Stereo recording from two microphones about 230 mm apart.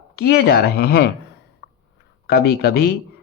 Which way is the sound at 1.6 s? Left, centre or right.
Left.